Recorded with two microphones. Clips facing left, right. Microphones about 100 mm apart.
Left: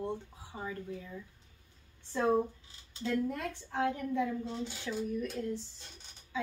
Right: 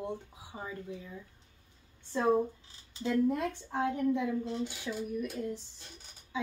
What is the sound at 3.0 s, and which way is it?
A woman's voice, 20° right (ahead or behind).